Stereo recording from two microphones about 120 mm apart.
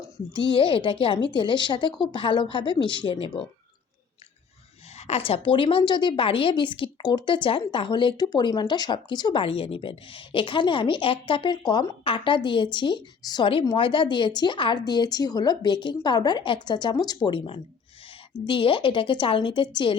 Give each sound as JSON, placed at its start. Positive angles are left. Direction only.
{"t": 0.3, "sound": "a woman's voice", "side_deg": 45}
{"t": 4.9, "sound": "a woman's voice", "side_deg": 60}